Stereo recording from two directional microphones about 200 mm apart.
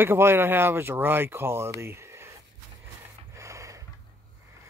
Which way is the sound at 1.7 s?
15° right (ahead or behind).